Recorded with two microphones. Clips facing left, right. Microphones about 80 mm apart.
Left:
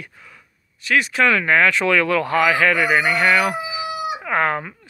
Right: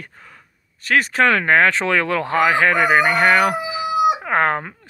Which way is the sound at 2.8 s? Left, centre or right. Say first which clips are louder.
Right 3 dB; right.